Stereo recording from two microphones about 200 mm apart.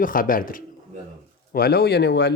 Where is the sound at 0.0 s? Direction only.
45° left (ahead or behind).